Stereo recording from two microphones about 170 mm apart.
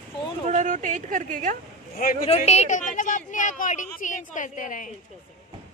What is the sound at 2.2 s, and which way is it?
A woman's voice, 40° left (ahead or behind).